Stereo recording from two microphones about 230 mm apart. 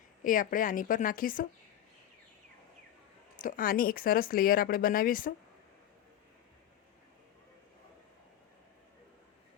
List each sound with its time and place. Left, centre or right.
0.3 s speech: left
3.4 s speech: left